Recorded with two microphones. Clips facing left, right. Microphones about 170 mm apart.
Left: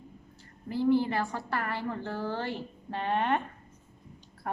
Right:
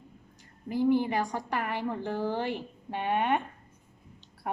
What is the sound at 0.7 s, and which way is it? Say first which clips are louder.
A woman's voice: even; 15° right (ahead or behind).